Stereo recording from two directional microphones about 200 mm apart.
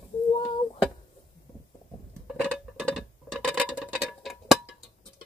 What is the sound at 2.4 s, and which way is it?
Clock, 5° left (ahead or behind).